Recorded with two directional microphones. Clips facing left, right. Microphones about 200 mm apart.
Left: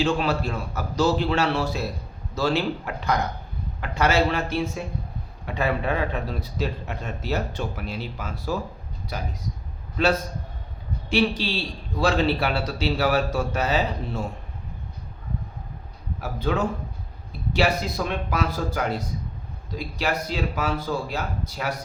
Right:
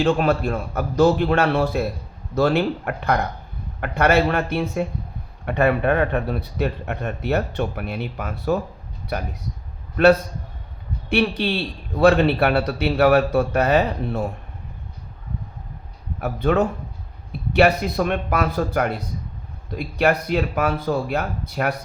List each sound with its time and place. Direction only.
0.0 s a man's voice: 55° right (ahead or behind)
16.2 s a man's voice: 60° right (ahead or behind)